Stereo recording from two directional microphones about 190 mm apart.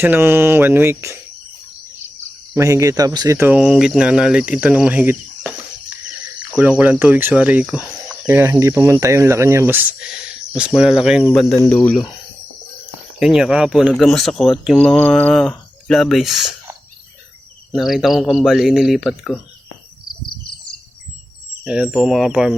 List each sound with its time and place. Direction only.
0.0 s speech: 10° right (ahead or behind)
2.6 s speech: 15° right (ahead or behind)
6.6 s speech: 5° right (ahead or behind)
11.5 s speech: 15° left (ahead or behind)
11.8 s speech: 5° left (ahead or behind)
13.1 s speech: centre (ahead or behind)
17.7 s speech: centre (ahead or behind)
21.6 s speech: 5° right (ahead or behind)